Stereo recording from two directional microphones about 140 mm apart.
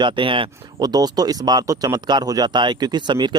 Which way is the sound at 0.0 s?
35° right (ahead or behind).